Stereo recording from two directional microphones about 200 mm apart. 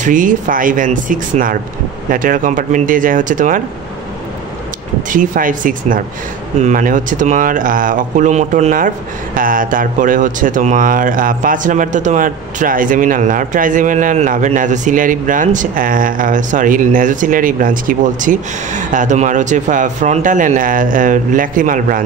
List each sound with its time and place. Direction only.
0.0 s speech: 40° right (ahead or behind)
5.1 s speech: 40° right (ahead or behind)